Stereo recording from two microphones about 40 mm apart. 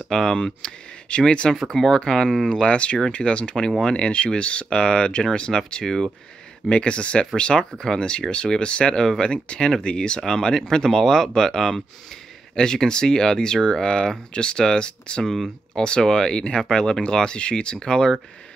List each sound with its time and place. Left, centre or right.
0.1 s speech: centre
2.6 s speech: left; by 6.1 s centre
6.7 s speech: left
15.2 s speech: centre
15.7 s speech: left